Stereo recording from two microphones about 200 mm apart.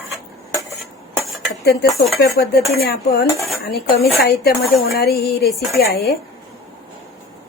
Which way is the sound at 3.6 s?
50° left (ahead or behind).